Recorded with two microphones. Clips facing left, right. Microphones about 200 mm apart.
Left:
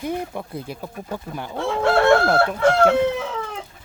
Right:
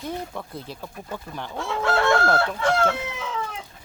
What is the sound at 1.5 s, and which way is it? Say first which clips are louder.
Chicken: left 5 dB; 25° left (ahead or behind).